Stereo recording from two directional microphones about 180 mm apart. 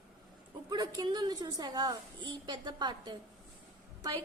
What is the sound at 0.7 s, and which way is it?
A woman's voice, 20° right (ahead or behind).